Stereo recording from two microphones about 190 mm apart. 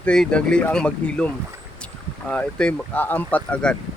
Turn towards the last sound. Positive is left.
turn(degrees=10)  # may be behind; listen again after turning